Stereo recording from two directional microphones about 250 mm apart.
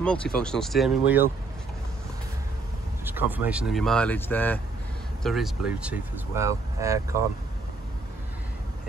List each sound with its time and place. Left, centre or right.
0.0 s speech: centre
3.1 s speech: centre